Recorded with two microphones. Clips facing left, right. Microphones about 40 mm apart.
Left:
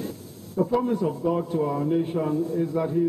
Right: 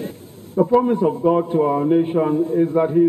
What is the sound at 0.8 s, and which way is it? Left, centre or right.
A man's voice, right.